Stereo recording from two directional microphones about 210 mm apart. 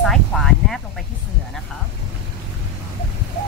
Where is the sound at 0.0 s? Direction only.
Centre (ahead or behind).